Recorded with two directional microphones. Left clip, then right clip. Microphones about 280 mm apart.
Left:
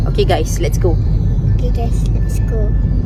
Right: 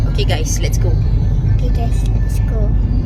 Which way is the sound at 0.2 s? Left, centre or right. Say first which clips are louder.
Left 6 dB; left.